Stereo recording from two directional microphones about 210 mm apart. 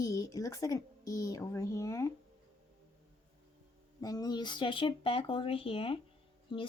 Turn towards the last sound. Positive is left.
turn(degrees=25)  # may be behind; listen again after turning